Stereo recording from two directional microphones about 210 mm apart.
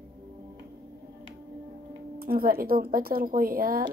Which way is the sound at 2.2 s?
45° right (ahead or behind).